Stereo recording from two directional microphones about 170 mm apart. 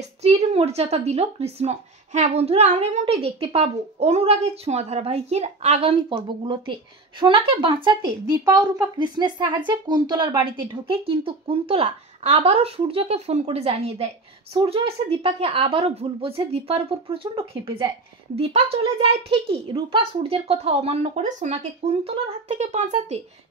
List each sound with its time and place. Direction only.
0.2 s speech: 40° right (ahead or behind)